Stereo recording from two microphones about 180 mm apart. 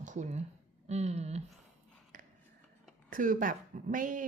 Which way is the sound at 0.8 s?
40° right (ahead or behind).